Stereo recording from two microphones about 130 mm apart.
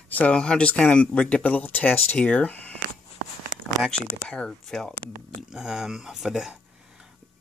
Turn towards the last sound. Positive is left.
turn(degrees=-5)  # may be behind; listen again after turning